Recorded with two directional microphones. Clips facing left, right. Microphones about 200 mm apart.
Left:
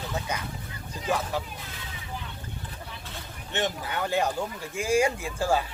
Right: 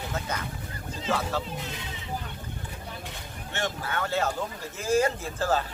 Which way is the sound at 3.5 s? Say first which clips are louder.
Left 2 dB; 15° left (ahead or behind).